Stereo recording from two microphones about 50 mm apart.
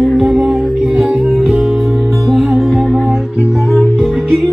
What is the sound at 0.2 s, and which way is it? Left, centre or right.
Music, centre.